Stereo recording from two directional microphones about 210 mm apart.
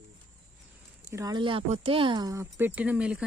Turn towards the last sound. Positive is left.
turn(degrees=-5)  # may be behind; listen again after turning